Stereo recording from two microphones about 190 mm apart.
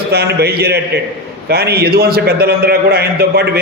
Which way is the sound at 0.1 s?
60° right (ahead or behind).